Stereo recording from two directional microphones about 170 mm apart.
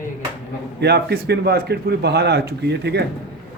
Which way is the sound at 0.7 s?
75° right (ahead or behind).